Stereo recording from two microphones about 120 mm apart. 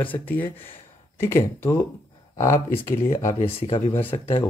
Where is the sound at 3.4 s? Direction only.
50° left (ahead or behind).